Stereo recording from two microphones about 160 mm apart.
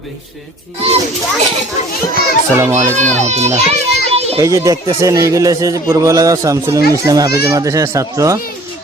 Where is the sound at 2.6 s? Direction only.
15° right (ahead or behind).